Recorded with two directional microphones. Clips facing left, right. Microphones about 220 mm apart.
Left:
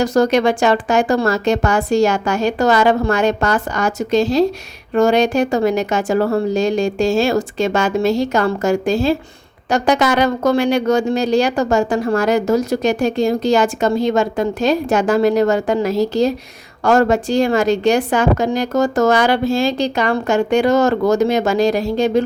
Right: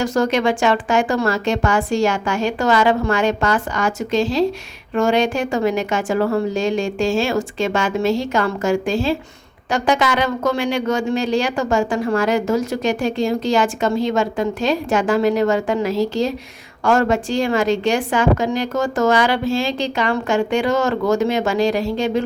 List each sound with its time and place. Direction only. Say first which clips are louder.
0.0 s speech: left 4 dB; 40° left (ahead or behind)